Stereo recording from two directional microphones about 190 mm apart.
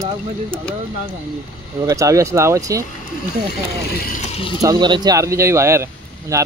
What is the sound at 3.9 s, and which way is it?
Speech, 55° left (ahead or behind).